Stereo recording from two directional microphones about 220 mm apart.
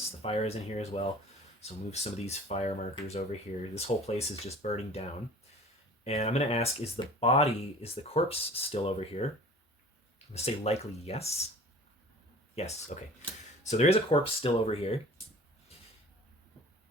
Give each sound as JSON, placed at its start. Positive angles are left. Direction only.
{"t": 0.2, "sound": "speech", "side_deg": 25}
{"t": 6.1, "sound": "speech", "side_deg": 30}
{"t": 10.3, "sound": "speech", "side_deg": 30}
{"t": 12.5, "sound": "speech", "side_deg": 30}